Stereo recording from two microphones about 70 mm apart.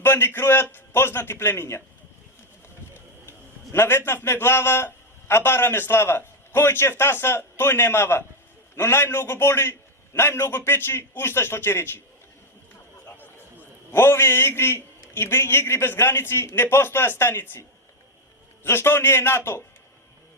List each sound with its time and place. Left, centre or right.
0.0 s a man's voice: left
2.9 s a sound: left
5.3 s a man's voice: left
13.9 s a man's voice: left
18.6 s a man's voice: left